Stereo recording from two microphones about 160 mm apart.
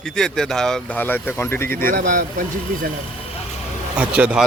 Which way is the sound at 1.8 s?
65° right (ahead or behind).